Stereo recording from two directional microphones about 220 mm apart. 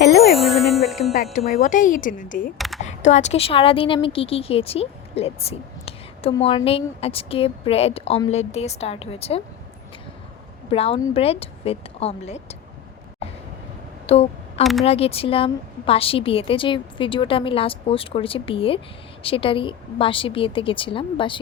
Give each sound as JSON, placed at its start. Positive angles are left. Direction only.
{"t": 0.1, "sound": "music", "side_deg": 0}
{"t": 1.5, "sound": "speech", "side_deg": 35}
{"t": 2.6, "sound": "speech", "side_deg": 0}
{"t": 2.8, "sound": "a woman's voice", "side_deg": 30}
{"t": 10.7, "sound": "a woman's voice", "side_deg": 25}
{"t": 14.1, "sound": "a sound", "side_deg": 30}
{"t": 14.6, "sound": "speech", "side_deg": 0}
{"t": 14.8, "sound": "a woman's voice", "side_deg": 25}